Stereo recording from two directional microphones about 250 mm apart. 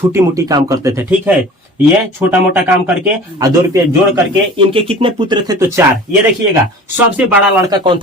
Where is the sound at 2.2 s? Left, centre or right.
Centre.